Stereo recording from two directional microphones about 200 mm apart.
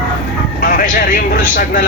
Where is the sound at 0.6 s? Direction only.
45° left (ahead or behind).